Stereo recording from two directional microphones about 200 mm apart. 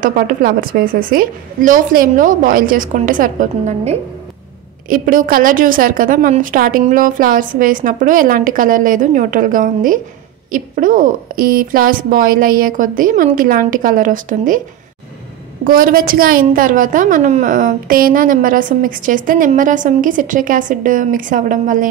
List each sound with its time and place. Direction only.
0.0 s a woman's voice: 45° right (ahead or behind)
15.6 s a woman's voice: 45° right (ahead or behind)